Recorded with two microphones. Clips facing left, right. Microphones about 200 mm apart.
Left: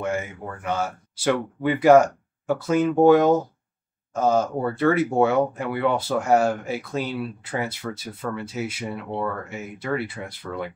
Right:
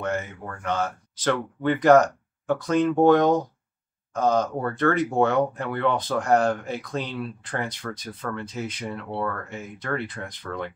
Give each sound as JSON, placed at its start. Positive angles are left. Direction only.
{"t": 0.0, "sound": "speech", "side_deg": 10}